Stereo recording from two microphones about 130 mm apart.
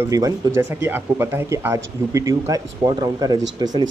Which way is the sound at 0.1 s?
25° right (ahead or behind).